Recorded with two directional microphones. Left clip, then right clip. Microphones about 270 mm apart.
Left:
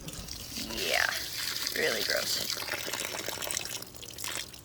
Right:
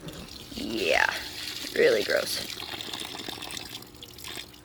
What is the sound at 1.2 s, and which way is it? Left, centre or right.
Water, centre.